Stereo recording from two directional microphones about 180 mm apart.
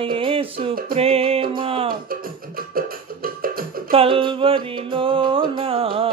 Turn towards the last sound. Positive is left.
turn(degrees=-30)  # may be behind; listen again after turning